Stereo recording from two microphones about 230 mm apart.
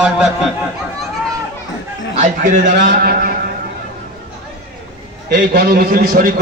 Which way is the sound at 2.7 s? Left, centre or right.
Right.